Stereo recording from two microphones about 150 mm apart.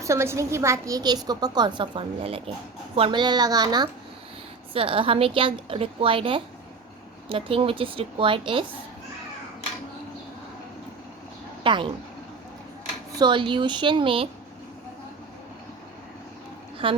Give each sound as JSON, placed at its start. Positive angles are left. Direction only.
{"t": 0.0, "sound": "a woman's voice", "side_deg": -20}
{"t": 11.6, "sound": "speech", "side_deg": -35}
{"t": 13.1, "sound": "a woman's voice", "side_deg": -30}
{"t": 16.8, "sound": "a woman's voice", "side_deg": -35}